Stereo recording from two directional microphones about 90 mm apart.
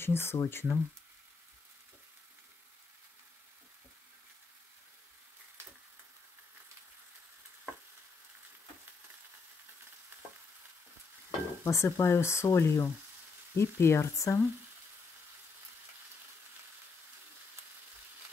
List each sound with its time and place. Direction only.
0.0 s speech: 25° left (ahead or behind)
11.6 s speech: 30° left (ahead or behind)